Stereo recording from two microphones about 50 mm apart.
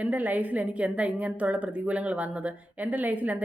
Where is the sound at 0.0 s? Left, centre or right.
Right.